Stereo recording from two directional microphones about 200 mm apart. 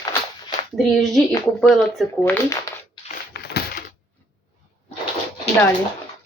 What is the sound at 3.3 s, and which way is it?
Crushing, 55° left (ahead or behind).